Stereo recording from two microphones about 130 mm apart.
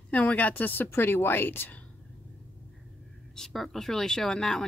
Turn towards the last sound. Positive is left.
turn(degrees=5)  # may be behind; listen again after turning